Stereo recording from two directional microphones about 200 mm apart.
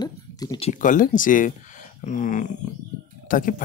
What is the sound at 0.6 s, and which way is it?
Speech, 40° left (ahead or behind).